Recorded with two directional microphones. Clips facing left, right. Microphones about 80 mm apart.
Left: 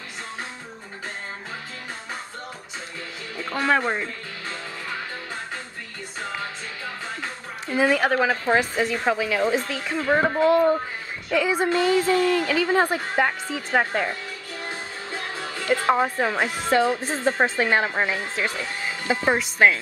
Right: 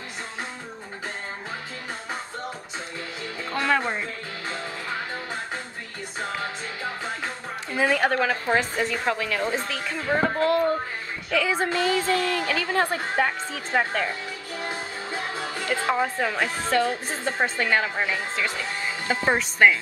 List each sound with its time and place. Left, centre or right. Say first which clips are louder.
3.3 s music: left 2 dB; centre
7.8 s a woman's voice: left 2 dB; centre; by 14.1 s left
14.6 s music: right 2 dB; centre
15.9 s a woman's voice: left 3 dB; centre
19.2 s speech: even; centre